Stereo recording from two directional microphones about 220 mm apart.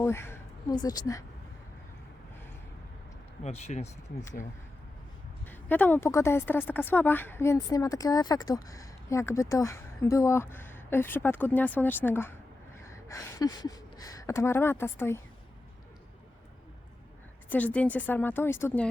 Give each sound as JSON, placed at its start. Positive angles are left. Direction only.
{"t": 0.0, "sound": "speech", "side_deg": 10}
{"t": 3.4, "sound": "speech", "side_deg": 30}
{"t": 5.5, "sound": "a woman's voice", "side_deg": 10}
{"t": 17.5, "sound": "a woman's voice", "side_deg": 5}